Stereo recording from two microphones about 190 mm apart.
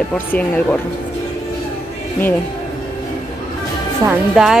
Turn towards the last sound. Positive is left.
turn(degrees=0)  # may be behind; listen again after turning